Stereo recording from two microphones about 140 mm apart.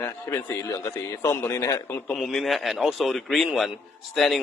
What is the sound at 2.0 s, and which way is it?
A man's voice, 5° left (ahead or behind).